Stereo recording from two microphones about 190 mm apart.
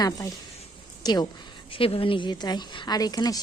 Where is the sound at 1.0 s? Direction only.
20° left (ahead or behind).